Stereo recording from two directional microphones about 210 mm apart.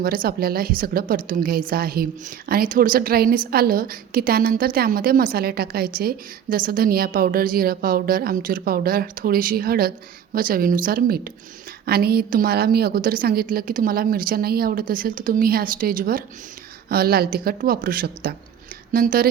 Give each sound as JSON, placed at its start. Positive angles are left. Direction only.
{"t": 0.0, "sound": "a woman's voice", "side_deg": -45}